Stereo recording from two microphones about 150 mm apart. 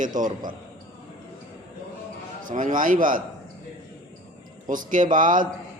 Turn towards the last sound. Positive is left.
turn(degrees=-60)  # may be behind; listen again after turning